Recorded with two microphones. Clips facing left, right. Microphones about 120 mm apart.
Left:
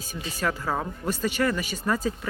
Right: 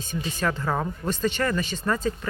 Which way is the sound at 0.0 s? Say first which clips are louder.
Right 2 dB; 5° left (ahead or behind).